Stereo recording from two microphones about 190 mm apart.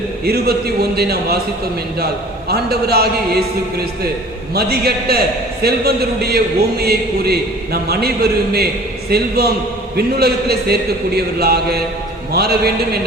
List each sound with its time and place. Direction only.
0.3 s a man's voice: 55° right (ahead or behind)
2.5 s a man's voice: 55° right (ahead or behind)